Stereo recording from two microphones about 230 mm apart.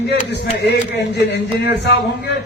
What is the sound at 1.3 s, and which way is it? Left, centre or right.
Speech, left.